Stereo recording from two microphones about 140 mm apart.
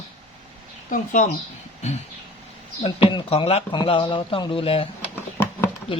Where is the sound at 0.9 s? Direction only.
65° left (ahead or behind).